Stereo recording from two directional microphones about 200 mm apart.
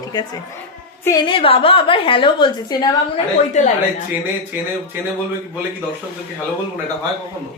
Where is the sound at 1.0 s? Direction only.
20° left (ahead or behind).